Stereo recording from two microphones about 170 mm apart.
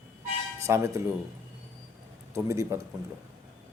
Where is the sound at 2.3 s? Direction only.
15° right (ahead or behind).